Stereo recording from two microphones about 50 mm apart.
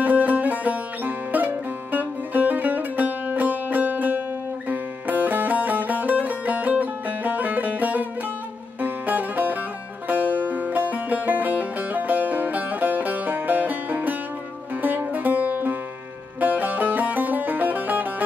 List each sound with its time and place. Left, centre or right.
0.0 s music: right